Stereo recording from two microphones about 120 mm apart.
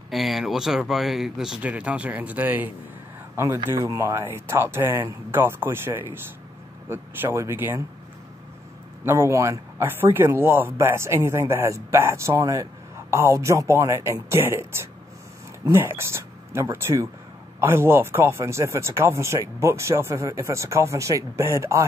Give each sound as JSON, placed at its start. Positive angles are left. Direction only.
{"t": 0.1, "sound": "speech", "side_deg": 0}
{"t": 9.0, "sound": "speech", "side_deg": -20}